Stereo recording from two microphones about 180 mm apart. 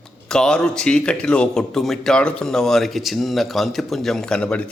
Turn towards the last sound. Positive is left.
turn(degrees=5)  # may be behind; listen again after turning